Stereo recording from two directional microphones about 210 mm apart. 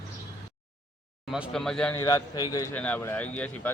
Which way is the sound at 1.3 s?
Centre (ahead or behind).